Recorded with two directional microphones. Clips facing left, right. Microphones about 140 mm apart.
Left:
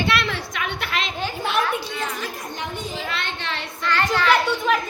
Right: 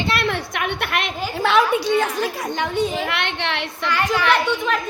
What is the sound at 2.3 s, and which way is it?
Speech, 90° right.